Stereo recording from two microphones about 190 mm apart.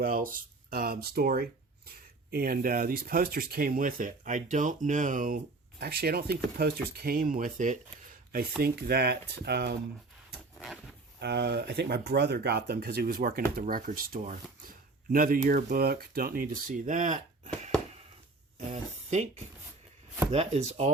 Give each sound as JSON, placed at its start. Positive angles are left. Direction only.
{"t": 0.0, "sound": "speech", "side_deg": -50}
{"t": 5.8, "sound": "speech", "side_deg": -55}
{"t": 11.2, "sound": "speech", "side_deg": -60}
{"t": 18.7, "sound": "speech", "side_deg": -35}
{"t": 20.3, "sound": "speech", "side_deg": -35}